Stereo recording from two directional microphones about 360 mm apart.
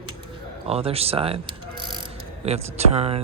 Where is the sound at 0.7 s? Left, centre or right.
Centre.